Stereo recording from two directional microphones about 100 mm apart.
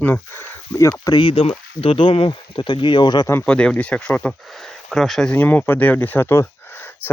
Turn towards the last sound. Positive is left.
turn(degrees=20)  # may be behind; listen again after turning